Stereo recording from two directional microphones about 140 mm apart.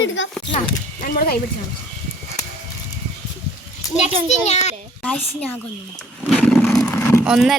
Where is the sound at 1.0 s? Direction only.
90° left.